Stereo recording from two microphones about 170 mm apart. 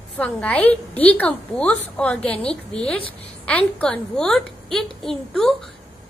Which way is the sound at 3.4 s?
10° left (ahead or behind).